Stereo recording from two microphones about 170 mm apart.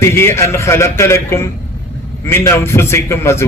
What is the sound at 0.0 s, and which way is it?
A man's voice, 15° left (ahead or behind).